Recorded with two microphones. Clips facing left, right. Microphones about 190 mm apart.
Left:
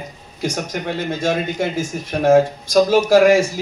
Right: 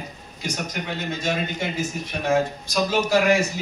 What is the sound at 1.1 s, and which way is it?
Speech, 50° left (ahead or behind).